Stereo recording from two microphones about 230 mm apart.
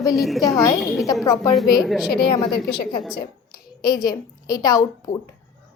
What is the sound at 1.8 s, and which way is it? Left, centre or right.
Speech, centre.